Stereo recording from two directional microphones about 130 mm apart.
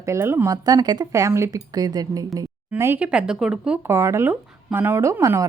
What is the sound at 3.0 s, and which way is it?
Speech, 10° right (ahead or behind).